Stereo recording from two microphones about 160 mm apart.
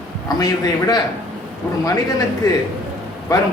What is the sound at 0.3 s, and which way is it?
Speech, 25° left (ahead or behind).